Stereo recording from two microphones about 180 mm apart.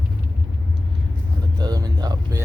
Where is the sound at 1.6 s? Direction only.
20° right (ahead or behind).